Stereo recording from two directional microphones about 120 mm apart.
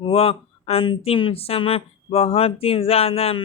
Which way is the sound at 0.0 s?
50° left (ahead or behind).